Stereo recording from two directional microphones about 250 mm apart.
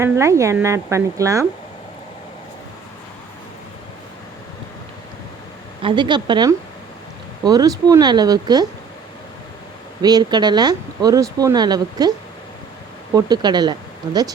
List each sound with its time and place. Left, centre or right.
0.0 s speech: centre
5.8 s speech: centre
10.0 s speech: centre
13.1 s speech: centre